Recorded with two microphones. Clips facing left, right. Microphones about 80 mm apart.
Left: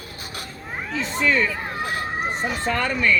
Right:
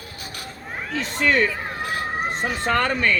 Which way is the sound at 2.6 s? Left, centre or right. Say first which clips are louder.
Right 3 dB; right.